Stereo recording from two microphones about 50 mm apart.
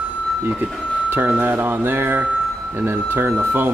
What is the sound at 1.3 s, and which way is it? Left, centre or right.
Speech, right.